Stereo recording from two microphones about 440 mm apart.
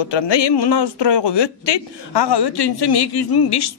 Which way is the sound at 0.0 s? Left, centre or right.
Left.